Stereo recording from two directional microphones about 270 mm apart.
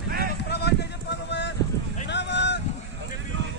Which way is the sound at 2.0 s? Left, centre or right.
Left.